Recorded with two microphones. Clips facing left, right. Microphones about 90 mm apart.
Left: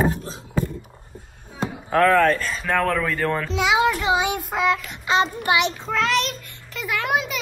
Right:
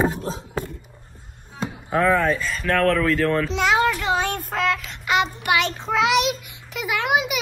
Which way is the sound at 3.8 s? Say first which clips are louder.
Left 1 dB; 15° left (ahead or behind).